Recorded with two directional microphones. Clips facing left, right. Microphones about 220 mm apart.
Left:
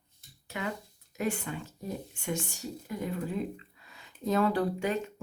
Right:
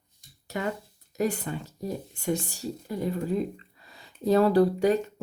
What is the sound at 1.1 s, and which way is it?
Speech, 40° right (ahead or behind).